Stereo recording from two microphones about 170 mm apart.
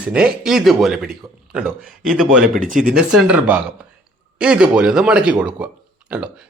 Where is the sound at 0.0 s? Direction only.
5° right (ahead or behind).